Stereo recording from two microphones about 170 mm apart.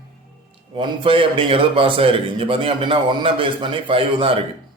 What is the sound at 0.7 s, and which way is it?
A man's voice, 30° right (ahead or behind).